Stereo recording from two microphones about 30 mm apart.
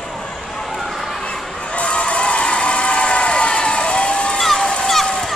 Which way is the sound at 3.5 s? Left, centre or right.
Left.